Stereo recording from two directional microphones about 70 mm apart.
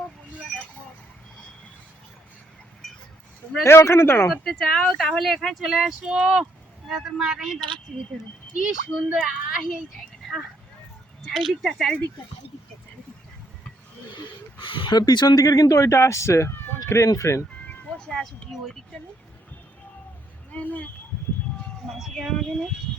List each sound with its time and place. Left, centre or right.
3.6 s speech: left
4.3 s speech: centre
8.6 s a child's voice: centre
10.0 s a sound: centre
11.3 s speech: centre
14.8 s speech: left
15.4 s speech: left
17.9 s a sound: centre
18.5 s speech: centre
20.5 s speech: left
21.8 s speech: centre